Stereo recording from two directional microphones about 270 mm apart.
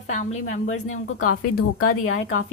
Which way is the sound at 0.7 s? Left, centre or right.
Left.